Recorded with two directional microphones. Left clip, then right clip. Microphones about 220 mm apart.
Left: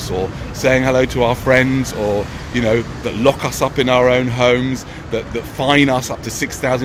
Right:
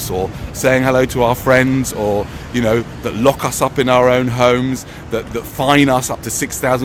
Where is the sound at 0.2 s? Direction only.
25° right (ahead or behind).